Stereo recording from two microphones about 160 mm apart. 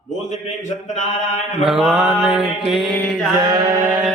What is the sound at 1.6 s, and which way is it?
Mantra, 5° right (ahead or behind).